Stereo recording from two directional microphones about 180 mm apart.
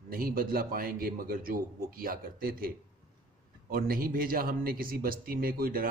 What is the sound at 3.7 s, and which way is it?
Speech, 55° right (ahead or behind).